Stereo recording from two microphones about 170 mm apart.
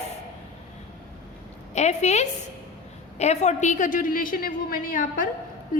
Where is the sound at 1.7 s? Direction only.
40° left (ahead or behind).